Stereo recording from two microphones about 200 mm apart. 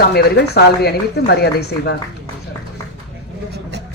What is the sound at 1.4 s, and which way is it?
Speech, 55° left (ahead or behind).